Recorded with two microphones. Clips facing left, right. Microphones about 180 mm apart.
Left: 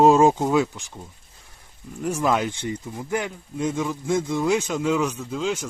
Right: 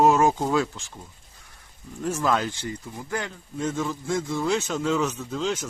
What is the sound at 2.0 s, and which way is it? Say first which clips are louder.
Speech: left 2 dB; 15° left (ahead or behind).